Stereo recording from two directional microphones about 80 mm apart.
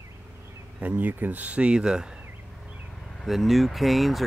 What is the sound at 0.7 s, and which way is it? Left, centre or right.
Speech, centre.